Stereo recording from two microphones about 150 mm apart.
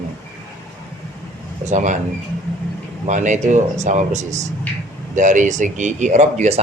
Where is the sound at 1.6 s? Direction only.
55° right (ahead or behind).